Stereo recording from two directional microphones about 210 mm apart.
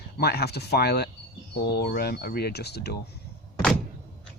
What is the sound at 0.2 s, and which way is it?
Speech, 50° left (ahead or behind).